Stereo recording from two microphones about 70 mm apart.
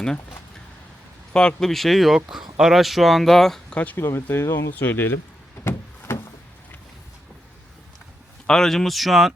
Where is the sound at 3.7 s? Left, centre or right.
Left.